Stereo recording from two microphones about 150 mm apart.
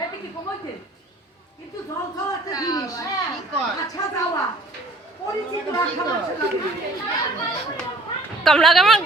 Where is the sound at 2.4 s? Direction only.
25° left (ahead or behind).